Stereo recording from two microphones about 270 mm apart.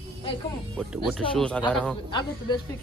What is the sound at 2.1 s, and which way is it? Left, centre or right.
Speech, centre.